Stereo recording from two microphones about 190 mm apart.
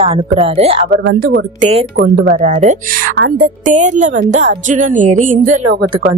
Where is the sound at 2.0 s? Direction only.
45° right (ahead or behind).